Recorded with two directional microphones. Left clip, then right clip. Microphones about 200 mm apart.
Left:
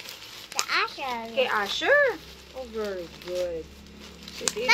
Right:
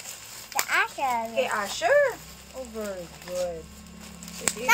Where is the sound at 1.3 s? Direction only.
10° left (ahead or behind).